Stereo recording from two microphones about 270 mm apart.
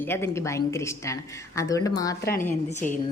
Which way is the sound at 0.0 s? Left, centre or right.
Centre.